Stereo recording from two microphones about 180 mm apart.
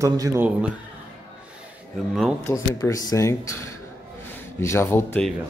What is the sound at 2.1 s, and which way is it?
Speech, 5° right (ahead or behind).